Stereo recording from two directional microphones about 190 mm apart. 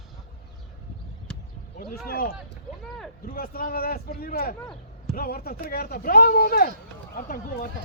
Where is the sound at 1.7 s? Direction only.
50° left (ahead or behind).